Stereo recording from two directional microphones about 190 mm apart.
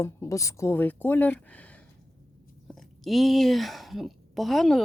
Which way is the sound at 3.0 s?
Centre (ahead or behind).